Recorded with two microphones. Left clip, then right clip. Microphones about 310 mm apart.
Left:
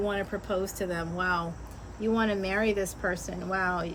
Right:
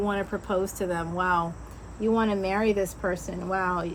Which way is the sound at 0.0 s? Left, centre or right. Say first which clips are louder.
Right 2 dB; centre.